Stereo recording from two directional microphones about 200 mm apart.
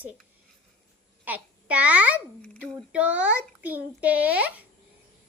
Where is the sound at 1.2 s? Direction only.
5° right (ahead or behind).